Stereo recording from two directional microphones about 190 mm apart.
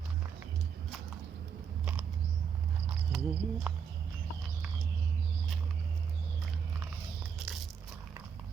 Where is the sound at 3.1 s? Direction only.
5° right (ahead or behind).